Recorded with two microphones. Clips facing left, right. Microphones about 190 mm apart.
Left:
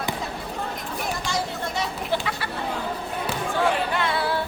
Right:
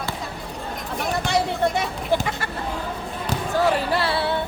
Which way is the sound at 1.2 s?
60° right (ahead or behind).